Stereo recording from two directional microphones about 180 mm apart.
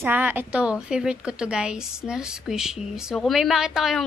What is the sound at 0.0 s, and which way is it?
A woman's voice, 10° right (ahead or behind).